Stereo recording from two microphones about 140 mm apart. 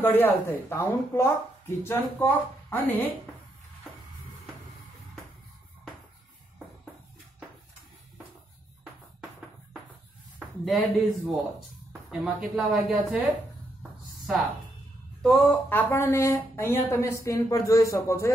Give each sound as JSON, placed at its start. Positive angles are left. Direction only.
{"t": 0.0, "sound": "speech", "side_deg": 15}
{"t": 10.6, "sound": "speech", "side_deg": 0}
{"t": 15.2, "sound": "speech", "side_deg": 0}
{"t": 15.7, "sound": "a woman's voice", "side_deg": 15}